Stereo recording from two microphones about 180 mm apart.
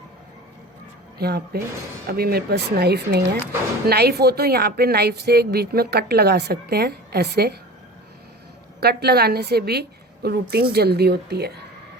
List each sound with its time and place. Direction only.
1.2 s a woman's voice: 65° right (ahead or behind)
8.8 s a woman's voice: 60° right (ahead or behind)